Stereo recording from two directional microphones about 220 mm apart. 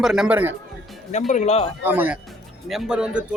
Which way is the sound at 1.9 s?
10° right (ahead or behind).